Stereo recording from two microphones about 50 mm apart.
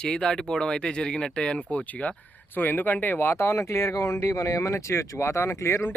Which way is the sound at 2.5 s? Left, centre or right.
Left.